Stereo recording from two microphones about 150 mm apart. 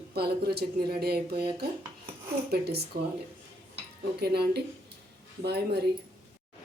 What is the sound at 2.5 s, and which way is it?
Speech, 90° right.